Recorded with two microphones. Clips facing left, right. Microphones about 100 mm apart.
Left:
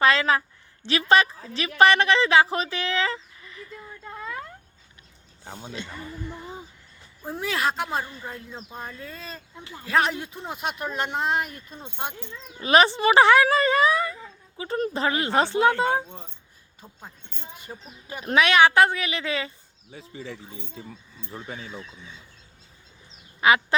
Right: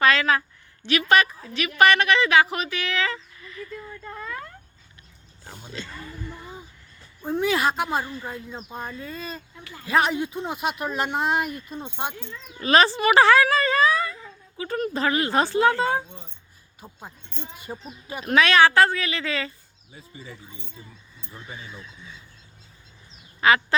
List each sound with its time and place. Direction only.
0.0 s a woman's voice: 25° left (ahead or behind)
5.5 s speech: 20° left (ahead or behind)
7.2 s speech: centre (ahead or behind)
9.6 s a man's voice: 25° left (ahead or behind)
9.8 s speech: centre (ahead or behind)
12.5 s speech: 20° left (ahead or behind)
16.8 s speech: 10° right (ahead or behind)
18.3 s a woman's voice: 15° left (ahead or behind)
19.9 s speech: 80° left
21.7 s speech: 20° left (ahead or behind)
23.4 s quack: 15° left (ahead or behind)